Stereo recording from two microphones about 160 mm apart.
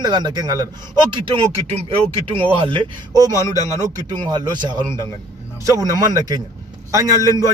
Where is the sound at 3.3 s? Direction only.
20° left (ahead or behind).